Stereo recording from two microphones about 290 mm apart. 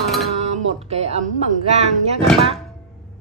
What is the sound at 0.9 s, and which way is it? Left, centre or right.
Speech, right.